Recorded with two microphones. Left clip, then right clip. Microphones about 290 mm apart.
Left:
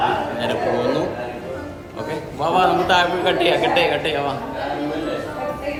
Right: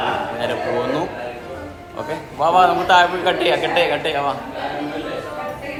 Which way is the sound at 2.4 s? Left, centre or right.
Centre.